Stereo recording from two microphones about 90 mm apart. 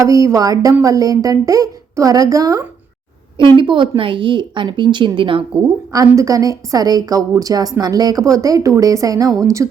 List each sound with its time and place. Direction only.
0.0 s a woman's voice: 40° right (ahead or behind)
3.6 s speech: 60° right (ahead or behind)
5.6 s a woman's voice: 40° right (ahead or behind)